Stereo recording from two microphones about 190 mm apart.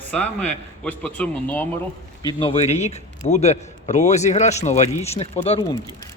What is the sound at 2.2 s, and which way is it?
A man's voice, 25° left (ahead or behind).